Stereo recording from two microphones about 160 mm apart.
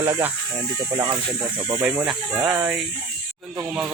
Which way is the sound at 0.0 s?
15° right (ahead or behind).